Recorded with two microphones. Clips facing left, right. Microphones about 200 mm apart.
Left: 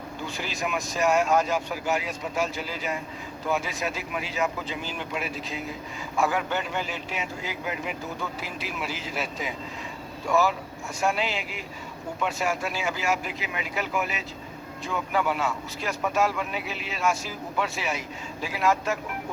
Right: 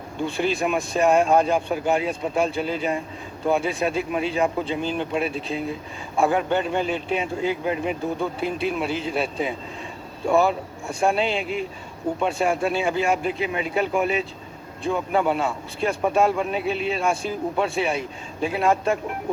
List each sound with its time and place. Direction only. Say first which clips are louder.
0.3 s a man's voice: right 8 dB; 30° right (ahead or behind)